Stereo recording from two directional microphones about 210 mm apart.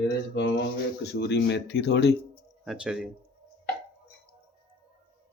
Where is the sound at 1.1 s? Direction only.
55° left (ahead or behind).